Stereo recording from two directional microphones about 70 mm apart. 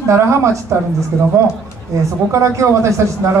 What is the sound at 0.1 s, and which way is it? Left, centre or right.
Speech, right.